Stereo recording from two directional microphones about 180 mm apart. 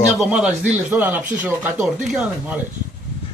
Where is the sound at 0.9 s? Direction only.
10° right (ahead or behind).